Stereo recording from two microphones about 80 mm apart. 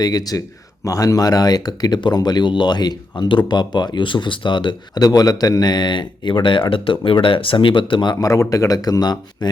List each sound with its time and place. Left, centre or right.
0.0 s speech: left
5.0 s speech: left
8.1 s speech: left